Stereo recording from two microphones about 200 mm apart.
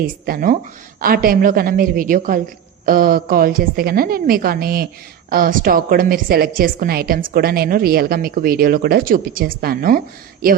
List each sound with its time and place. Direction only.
0.3 s a woman's voice: 45° right (ahead or behind)